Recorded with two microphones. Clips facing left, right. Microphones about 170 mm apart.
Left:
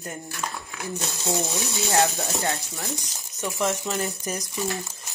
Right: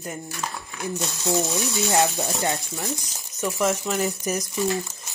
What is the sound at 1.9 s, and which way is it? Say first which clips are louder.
Speech: left 1 dB; 20° right (ahead or behind).